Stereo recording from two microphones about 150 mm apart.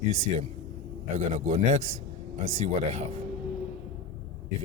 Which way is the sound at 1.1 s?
55° right (ahead or behind).